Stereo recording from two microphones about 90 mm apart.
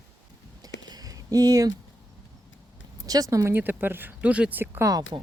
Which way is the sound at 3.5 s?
20° right (ahead or behind).